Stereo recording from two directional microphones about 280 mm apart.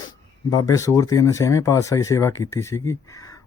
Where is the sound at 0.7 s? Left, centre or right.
Centre.